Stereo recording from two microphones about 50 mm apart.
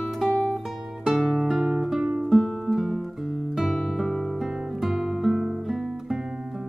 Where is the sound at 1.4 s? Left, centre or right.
Centre.